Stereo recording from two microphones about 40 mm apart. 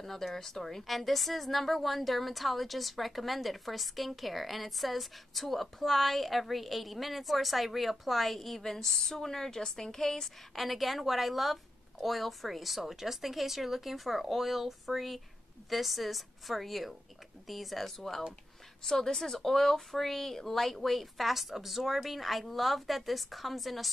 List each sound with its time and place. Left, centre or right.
0.0 s a woman's voice: centre